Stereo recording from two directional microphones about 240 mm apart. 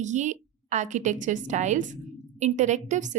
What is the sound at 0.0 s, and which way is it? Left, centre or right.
A woman's voice, right.